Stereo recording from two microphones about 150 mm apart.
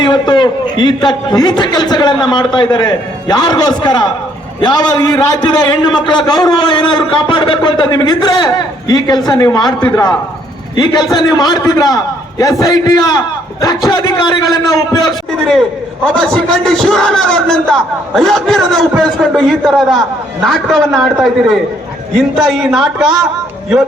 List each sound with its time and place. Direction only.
0.0 s a man's voice: 30° left (ahead or behind)
16.2 s a man's voice: 5° left (ahead or behind)
22.2 s a man's voice: centre (ahead or behind)